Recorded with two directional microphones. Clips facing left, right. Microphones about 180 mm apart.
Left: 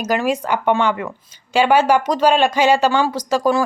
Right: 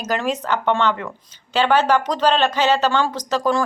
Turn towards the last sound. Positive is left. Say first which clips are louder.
# left 3 dB
turn(degrees=10)  # may be behind; listen again after turning